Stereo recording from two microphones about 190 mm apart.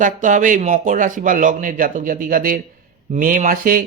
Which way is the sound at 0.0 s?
40° right (ahead or behind).